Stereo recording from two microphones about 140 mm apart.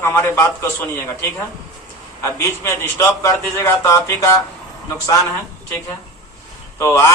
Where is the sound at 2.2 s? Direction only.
20° left (ahead or behind).